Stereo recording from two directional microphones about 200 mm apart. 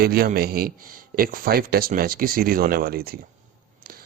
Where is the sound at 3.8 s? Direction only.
50° right (ahead or behind).